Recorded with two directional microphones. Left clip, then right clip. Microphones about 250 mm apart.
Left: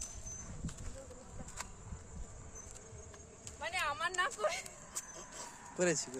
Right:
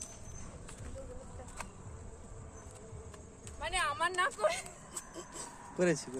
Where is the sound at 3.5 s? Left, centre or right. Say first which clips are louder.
Right 3 dB; right.